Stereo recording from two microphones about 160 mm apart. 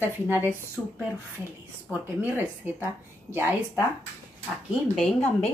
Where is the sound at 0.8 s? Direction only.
10° left (ahead or behind).